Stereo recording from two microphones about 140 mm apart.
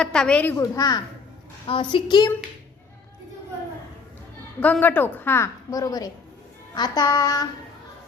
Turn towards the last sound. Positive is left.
turn(degrees=25)  # may be behind; listen again after turning